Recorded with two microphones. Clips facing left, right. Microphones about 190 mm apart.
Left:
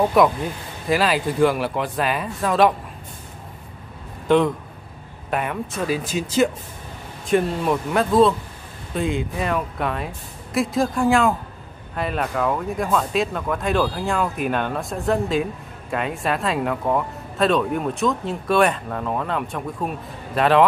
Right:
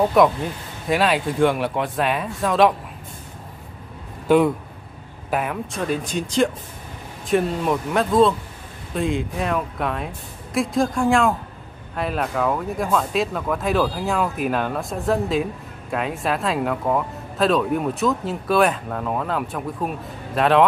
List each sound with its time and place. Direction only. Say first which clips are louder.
0.2 s speech: right 1 dB; centre (ahead or behind)
4.3 s speech: right 1 dB; 5° right (ahead or behind)